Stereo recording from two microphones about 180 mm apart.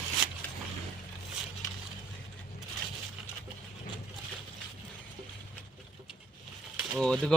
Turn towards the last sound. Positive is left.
turn(degrees=5)  # may be behind; listen again after turning